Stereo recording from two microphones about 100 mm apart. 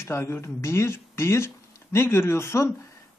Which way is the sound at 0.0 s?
25° left (ahead or behind).